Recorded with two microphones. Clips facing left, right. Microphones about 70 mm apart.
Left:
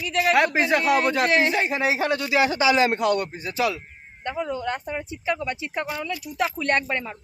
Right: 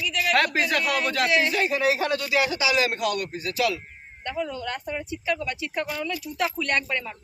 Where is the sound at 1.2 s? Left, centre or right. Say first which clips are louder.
Right 1 dB; left.